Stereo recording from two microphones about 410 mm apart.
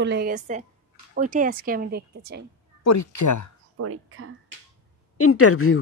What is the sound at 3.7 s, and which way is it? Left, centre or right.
Speech, right.